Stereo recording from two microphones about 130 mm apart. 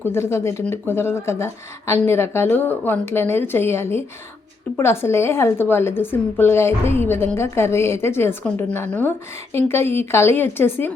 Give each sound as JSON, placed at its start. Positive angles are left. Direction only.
{"t": 0.0, "sound": "a woman's voice", "side_deg": 20}